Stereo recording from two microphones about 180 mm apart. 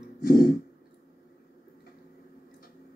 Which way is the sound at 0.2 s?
55° left (ahead or behind).